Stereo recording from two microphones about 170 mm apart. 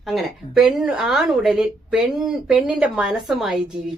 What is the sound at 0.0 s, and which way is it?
Speech, centre (ahead or behind).